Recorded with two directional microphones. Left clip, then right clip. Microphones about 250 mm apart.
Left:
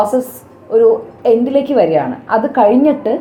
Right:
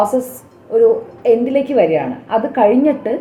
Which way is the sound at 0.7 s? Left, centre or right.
Left.